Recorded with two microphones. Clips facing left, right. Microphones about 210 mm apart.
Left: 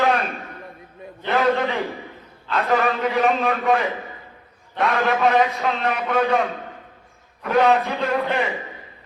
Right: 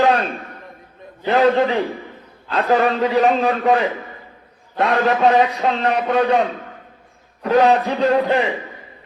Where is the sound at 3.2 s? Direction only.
35° right (ahead or behind).